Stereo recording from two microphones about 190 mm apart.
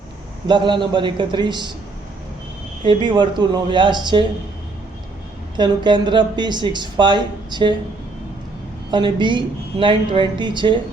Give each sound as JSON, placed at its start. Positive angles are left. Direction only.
{"t": 0.4, "sound": "speech", "side_deg": -25}
{"t": 2.8, "sound": "speech", "side_deg": -25}
{"t": 5.5, "sound": "speech", "side_deg": -25}
{"t": 8.9, "sound": "speech", "side_deg": -25}